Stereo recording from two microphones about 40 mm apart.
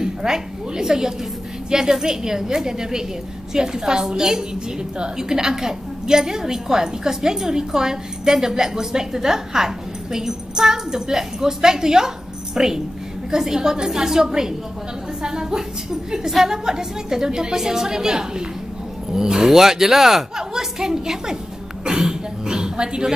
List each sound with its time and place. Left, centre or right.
0.0 s a woman's voice: centre